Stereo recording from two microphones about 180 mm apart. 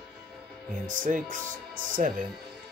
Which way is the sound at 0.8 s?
45° right (ahead or behind).